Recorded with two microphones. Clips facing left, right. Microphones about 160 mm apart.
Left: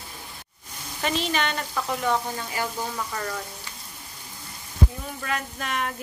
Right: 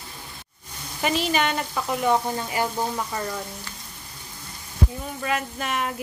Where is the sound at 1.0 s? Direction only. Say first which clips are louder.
Right 3 dB; 10° right (ahead or behind).